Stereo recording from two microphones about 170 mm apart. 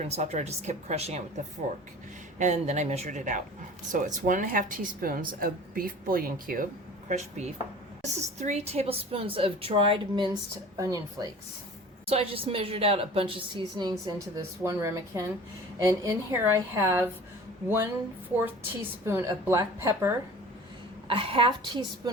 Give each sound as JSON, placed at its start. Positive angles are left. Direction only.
{"t": 0.0, "sound": "a woman's voice", "side_deg": -40}
{"t": 2.4, "sound": "a woman's voice", "side_deg": -45}
{"t": 7.1, "sound": "a woman's voice", "side_deg": -40}
{"t": 10.8, "sound": "speech", "side_deg": -20}
{"t": 12.0, "sound": "a woman's voice", "side_deg": -35}
{"t": 18.3, "sound": "a woman's voice", "side_deg": -10}
{"t": 21.1, "sound": "a woman's voice", "side_deg": -30}